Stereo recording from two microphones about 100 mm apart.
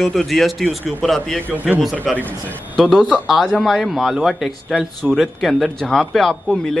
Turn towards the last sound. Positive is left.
turn(degrees=5)  # may be behind; listen again after turning